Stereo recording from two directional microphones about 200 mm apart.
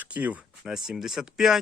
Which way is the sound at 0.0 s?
10° right (ahead or behind).